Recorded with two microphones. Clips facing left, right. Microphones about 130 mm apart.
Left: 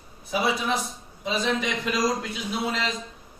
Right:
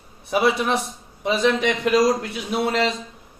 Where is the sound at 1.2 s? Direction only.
70° right (ahead or behind).